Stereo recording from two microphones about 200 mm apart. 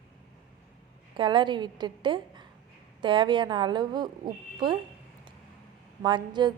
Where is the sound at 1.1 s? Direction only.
25° right (ahead or behind).